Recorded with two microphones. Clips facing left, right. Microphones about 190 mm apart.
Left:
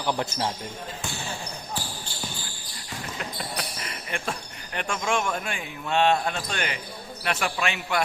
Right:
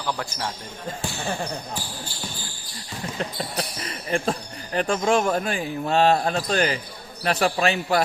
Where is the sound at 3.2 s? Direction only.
35° right (ahead or behind).